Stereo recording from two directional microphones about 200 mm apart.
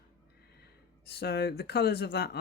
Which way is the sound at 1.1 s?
55° left (ahead or behind).